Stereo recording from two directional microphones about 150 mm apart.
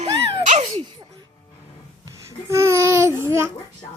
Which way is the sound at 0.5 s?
45° right (ahead or behind).